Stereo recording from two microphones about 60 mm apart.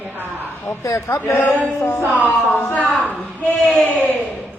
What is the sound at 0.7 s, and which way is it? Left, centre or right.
A man's voice, left.